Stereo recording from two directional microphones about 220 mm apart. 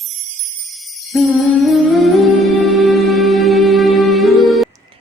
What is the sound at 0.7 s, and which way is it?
Jingle bell, centre (ahead or behind).